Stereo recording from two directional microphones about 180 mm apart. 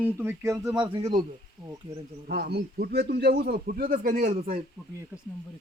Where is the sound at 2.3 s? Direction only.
60° right (ahead or behind).